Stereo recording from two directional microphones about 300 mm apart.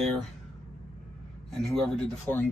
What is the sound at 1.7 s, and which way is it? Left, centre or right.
Speech, centre.